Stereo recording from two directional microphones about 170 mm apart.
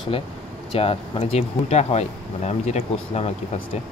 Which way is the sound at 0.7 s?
35° left (ahead or behind).